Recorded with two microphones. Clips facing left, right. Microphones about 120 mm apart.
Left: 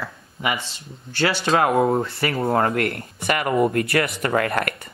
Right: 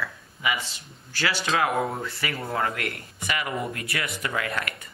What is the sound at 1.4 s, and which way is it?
Speech, 40° left (ahead or behind).